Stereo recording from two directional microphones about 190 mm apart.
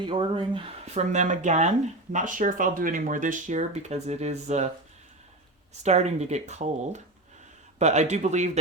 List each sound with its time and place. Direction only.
0.0 s speech: 25° right (ahead or behind)
5.8 s speech: 35° right (ahead or behind)